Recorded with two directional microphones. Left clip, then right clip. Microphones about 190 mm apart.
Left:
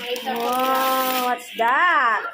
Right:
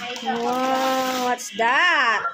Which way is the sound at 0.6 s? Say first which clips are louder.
Left 2 dB; 15° right (ahead or behind).